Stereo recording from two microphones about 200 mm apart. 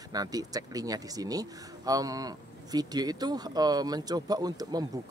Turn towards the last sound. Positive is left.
turn(degrees=-20)  # may be behind; listen again after turning